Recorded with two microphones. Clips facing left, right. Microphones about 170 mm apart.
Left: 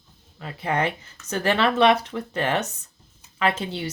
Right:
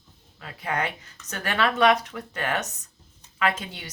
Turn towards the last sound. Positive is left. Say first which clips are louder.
# left 3 dB
turn(degrees=30)  # may be behind; listen again after turning